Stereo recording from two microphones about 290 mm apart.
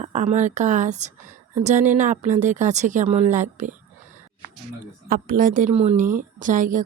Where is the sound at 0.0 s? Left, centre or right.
Right.